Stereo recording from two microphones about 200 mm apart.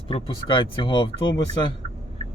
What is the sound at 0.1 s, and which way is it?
Speech, 25° left (ahead or behind).